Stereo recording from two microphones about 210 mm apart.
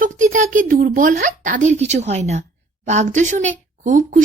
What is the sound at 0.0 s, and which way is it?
Speech, 40° right (ahead or behind).